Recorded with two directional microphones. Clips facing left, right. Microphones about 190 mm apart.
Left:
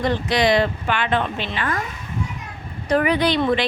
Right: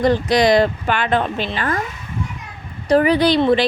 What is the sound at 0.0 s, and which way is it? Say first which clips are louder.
Speech: right 5 dB; 40° right (ahead or behind).